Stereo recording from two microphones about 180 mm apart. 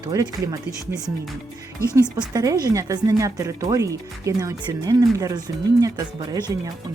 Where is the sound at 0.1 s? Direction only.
20° right (ahead or behind).